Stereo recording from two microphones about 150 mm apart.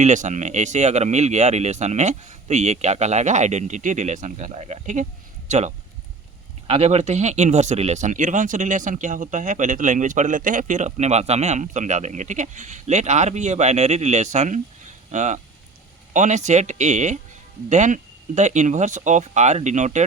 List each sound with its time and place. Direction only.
0.0 s speech: 55° right (ahead or behind)